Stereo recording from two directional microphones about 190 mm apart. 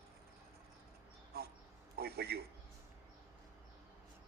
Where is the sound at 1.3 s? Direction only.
55° right (ahead or behind).